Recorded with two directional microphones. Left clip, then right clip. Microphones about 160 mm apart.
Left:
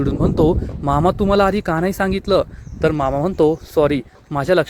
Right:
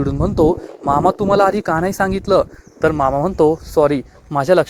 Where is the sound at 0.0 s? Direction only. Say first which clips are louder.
Even; 35° left (ahead or behind).